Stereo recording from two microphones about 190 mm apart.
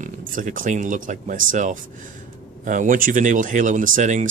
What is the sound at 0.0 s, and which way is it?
Speech, 45° right (ahead or behind).